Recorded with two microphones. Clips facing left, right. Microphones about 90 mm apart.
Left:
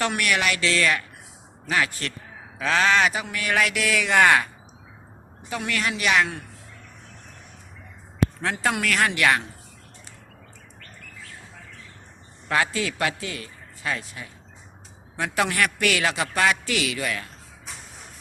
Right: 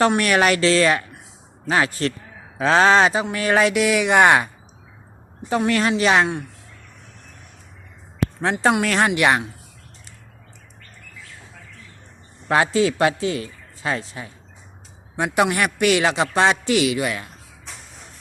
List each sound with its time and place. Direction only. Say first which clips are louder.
0.0 s a man's voice: right 7 dB; 35° right (ahead or behind); by 4.4 s 20° right (ahead or behind)
5.5 s speech: right 8 dB; 35° right (ahead or behind)
8.4 s a man's voice: right 6 dB; 25° right (ahead or behind)
12.5 s a man's voice: right 7 dB; 25° right (ahead or behind)